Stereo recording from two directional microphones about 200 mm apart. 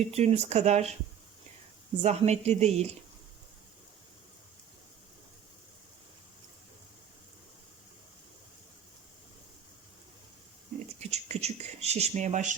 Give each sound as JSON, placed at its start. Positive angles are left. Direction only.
{"t": 0.1, "sound": "speech", "side_deg": -30}
{"t": 2.0, "sound": "speech", "side_deg": -35}
{"t": 11.1, "sound": "a sound", "side_deg": -30}